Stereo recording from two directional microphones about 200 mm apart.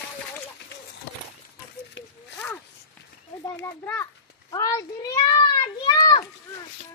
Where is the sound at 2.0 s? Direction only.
65° left (ahead or behind).